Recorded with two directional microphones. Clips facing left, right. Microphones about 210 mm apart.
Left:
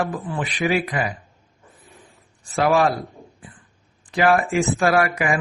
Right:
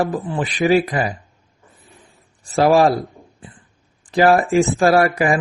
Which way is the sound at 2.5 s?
35° right (ahead or behind).